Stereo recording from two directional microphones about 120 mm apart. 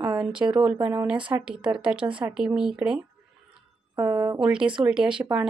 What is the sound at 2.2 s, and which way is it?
Speech, 5° right (ahead or behind).